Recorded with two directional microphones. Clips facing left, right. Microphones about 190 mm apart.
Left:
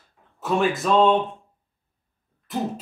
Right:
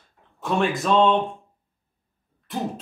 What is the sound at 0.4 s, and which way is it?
Speech, centre (ahead or behind).